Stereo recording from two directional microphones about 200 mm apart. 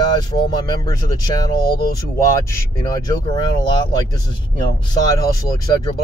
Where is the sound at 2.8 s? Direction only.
20° left (ahead or behind).